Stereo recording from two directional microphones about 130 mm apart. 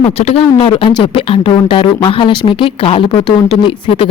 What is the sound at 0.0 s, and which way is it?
A woman's voice, 50° left (ahead or behind).